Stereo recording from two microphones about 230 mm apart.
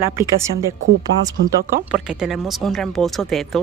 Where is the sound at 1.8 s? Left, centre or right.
Centre.